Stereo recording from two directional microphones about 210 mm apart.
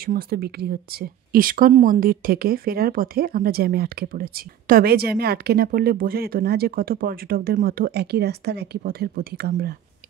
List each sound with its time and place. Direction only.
0.0 s speech: 45° right (ahead or behind)